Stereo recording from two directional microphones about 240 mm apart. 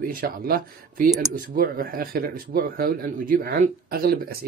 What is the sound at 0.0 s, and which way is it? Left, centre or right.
Speech, right.